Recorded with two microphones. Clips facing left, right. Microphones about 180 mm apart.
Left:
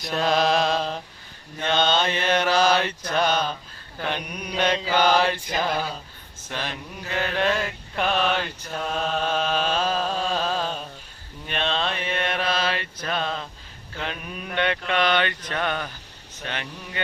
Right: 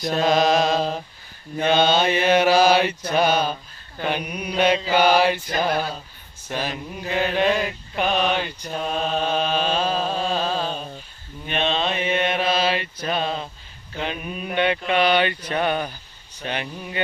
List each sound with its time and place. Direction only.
0.0 s mantra: centre (ahead or behind)
12.1 s mantra: 20° right (ahead or behind)